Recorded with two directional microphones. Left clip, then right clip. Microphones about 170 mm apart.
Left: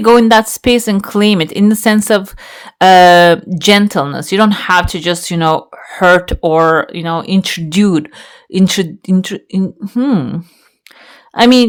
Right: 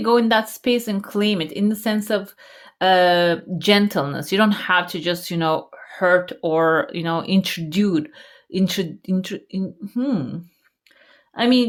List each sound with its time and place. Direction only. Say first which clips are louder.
0.0 s speech: left 10 dB; 40° left (ahead or behind)
3.6 s speech: left 4 dB; 30° left (ahead or behind)
7.7 s speech: left 9 dB; 40° left (ahead or behind)
11.3 s speech: left 10 dB; 45° left (ahead or behind)